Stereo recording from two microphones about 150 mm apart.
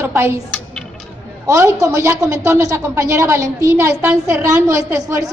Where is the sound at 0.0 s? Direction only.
15° right (ahead or behind).